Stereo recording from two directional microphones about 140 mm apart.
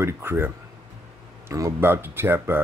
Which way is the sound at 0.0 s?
20° right (ahead or behind).